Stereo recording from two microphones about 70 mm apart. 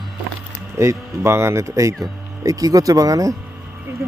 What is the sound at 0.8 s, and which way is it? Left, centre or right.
Speech, right.